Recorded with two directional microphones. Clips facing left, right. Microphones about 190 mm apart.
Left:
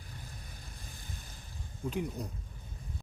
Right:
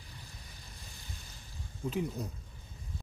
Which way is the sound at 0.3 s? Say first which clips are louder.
Left 3 dB; 50° left (ahead or behind).